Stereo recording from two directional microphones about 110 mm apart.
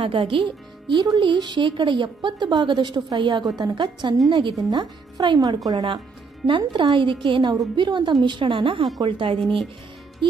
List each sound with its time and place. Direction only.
0.0 s speech: 50° right (ahead or behind)
4.6 s speech: 35° right (ahead or behind); by 9.4 s 50° right (ahead or behind)